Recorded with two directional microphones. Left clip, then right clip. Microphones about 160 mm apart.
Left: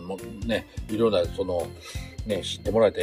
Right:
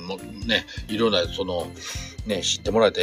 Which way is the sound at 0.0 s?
Centre (ahead or behind).